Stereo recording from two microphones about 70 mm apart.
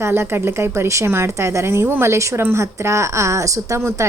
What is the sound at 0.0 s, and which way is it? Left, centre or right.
A woman's voice, right.